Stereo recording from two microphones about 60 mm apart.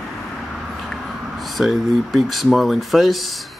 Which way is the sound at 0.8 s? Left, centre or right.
Centre.